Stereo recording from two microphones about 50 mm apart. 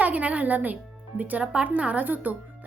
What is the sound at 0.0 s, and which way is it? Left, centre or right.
Speech, right.